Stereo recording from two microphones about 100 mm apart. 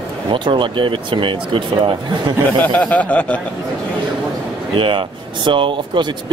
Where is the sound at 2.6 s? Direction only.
15° left (ahead or behind).